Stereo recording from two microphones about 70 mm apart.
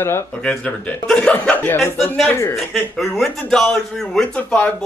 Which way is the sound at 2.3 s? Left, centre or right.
Left.